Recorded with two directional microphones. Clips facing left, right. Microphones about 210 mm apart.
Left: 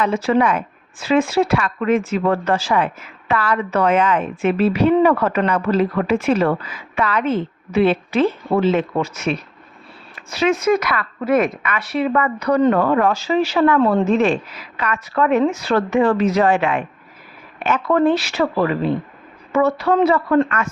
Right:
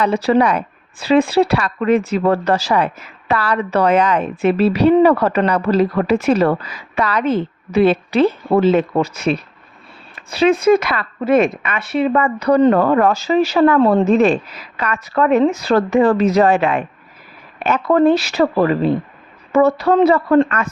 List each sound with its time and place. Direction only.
0.0 s speech: 35° right (ahead or behind)